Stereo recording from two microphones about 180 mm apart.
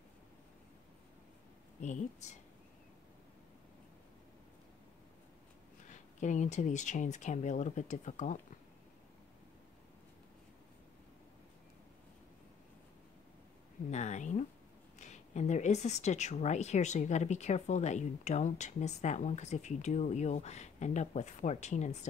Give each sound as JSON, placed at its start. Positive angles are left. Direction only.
{"t": 1.8, "sound": "speech", "side_deg": 40}
{"t": 5.9, "sound": "speech", "side_deg": 45}
{"t": 13.8, "sound": "speech", "side_deg": 40}